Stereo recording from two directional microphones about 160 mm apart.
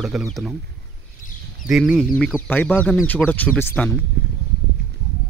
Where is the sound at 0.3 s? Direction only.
Centre (ahead or behind).